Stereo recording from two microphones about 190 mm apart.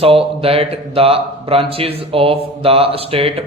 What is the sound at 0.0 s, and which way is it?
Speech, 30° right (ahead or behind).